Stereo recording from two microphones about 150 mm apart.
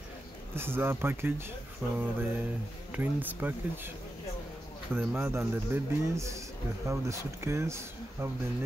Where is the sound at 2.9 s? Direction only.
10° right (ahead or behind).